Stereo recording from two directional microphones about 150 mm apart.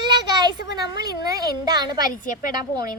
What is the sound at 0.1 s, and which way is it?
A child's voice, 30° right (ahead or behind).